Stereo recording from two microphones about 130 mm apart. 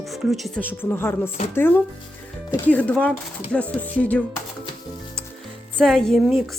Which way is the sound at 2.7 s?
10° left (ahead or behind).